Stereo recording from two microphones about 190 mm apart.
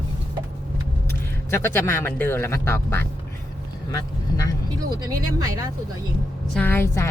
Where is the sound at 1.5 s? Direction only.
15° left (ahead or behind).